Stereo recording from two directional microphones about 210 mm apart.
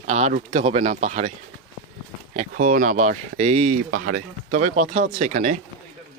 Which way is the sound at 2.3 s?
40° right (ahead or behind).